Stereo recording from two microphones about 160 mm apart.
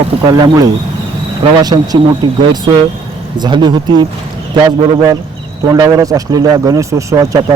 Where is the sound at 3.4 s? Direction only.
30° right (ahead or behind).